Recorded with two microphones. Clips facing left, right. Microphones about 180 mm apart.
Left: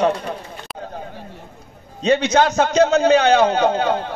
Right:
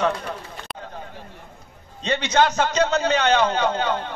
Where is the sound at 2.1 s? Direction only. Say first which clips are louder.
Left 4 dB; 45° left (ahead or behind).